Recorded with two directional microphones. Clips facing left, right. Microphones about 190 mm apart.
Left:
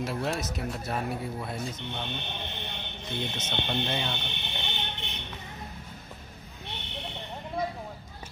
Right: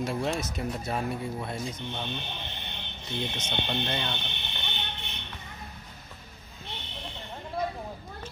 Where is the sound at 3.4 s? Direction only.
5° left (ahead or behind).